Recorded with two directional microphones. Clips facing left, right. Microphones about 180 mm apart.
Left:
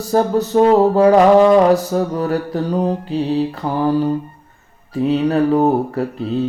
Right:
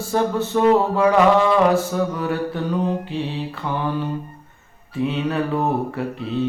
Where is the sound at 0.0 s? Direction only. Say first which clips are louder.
Left 5 dB; 40° left (ahead or behind).